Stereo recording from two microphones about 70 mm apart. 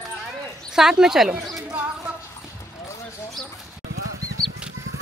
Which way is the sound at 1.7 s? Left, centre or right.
Right.